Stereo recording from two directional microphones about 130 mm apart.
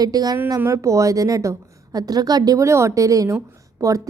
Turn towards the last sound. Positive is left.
turn(degrees=-25)  # may be behind; listen again after turning